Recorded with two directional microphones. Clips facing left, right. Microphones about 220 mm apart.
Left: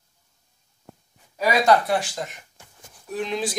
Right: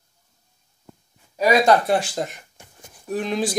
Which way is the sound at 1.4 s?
25° right (ahead or behind).